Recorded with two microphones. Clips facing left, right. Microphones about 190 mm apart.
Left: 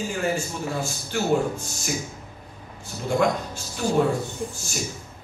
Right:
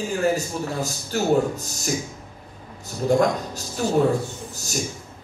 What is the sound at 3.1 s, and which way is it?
Speech, 40° right (ahead or behind).